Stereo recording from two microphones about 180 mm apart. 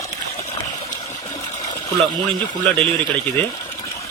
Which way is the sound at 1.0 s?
40° left (ahead or behind).